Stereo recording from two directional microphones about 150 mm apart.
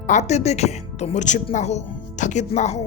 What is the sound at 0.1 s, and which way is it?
Speech, 50° left (ahead or behind).